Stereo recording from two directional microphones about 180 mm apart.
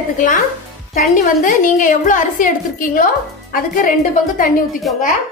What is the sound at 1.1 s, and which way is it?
A woman's voice, 45° left (ahead or behind).